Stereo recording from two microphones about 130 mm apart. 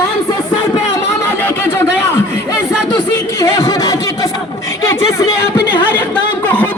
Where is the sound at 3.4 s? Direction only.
25° left (ahead or behind).